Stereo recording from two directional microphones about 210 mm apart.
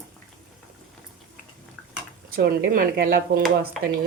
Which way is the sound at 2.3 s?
45° right (ahead or behind).